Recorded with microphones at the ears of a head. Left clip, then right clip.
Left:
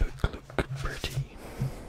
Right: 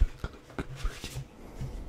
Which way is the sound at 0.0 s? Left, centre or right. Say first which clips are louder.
Left 8 dB; left.